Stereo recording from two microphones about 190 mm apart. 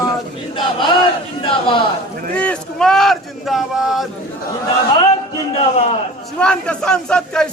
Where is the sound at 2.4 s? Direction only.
5° left (ahead or behind).